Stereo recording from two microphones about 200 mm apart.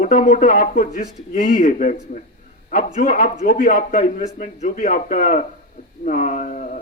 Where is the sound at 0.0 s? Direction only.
35° left (ahead or behind).